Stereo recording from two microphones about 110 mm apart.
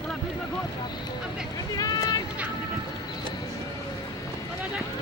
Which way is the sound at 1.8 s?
35° left (ahead or behind).